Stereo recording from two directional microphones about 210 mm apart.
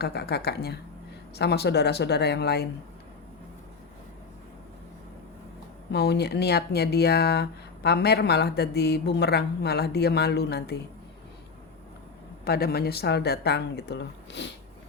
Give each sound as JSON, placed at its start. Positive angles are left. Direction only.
{"t": 0.0, "sound": "speech", "side_deg": 50}
{"t": 5.9, "sound": "speech", "side_deg": 50}
{"t": 12.5, "sound": "speech", "side_deg": 45}